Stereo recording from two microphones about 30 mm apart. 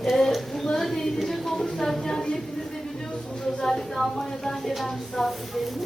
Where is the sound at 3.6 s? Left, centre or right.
Centre.